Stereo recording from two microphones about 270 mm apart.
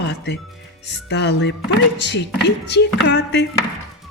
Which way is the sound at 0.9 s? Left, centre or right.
Left.